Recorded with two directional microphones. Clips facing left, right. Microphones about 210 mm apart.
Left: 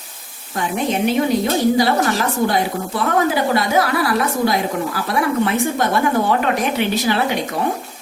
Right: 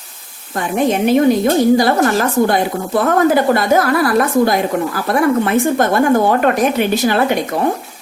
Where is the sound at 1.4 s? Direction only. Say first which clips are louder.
Right 4 dB; 50° right (ahead or behind).